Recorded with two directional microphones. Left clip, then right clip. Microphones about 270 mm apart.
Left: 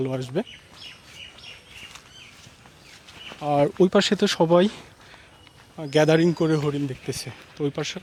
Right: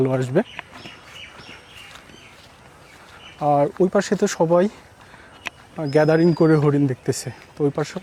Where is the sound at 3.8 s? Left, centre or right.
Centre.